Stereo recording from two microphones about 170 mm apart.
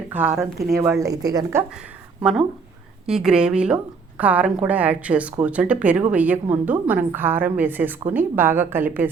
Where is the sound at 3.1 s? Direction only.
5° right (ahead or behind).